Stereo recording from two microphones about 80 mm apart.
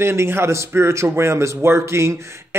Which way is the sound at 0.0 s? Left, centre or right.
Right.